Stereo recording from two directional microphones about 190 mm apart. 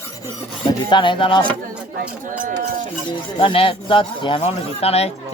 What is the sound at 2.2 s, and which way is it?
Speech, 45° right (ahead or behind).